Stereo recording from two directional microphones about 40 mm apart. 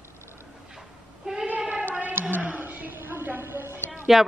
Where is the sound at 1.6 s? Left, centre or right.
Right.